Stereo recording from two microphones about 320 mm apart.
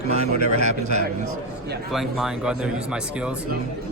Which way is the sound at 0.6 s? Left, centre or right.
Right.